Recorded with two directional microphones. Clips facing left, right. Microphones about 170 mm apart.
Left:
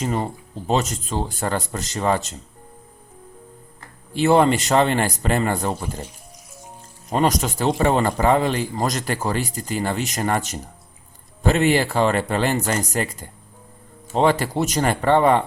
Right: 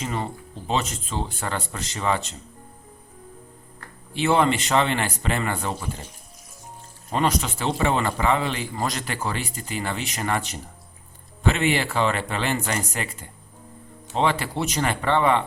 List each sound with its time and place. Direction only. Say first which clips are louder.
0.0 s a man's voice: left 5 dB; 40° left (ahead or behind)
4.1 s a man's voice: left 4 dB; 40° left (ahead or behind)
7.1 s a man's voice: left 3 dB; 40° left (ahead or behind)